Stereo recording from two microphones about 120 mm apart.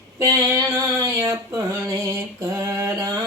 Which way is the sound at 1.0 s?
25° right (ahead or behind).